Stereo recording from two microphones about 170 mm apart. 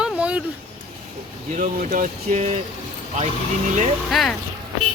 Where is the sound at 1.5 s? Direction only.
45° right (ahead or behind).